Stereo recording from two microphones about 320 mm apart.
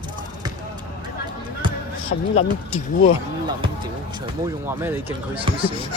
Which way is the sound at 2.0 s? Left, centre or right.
Centre.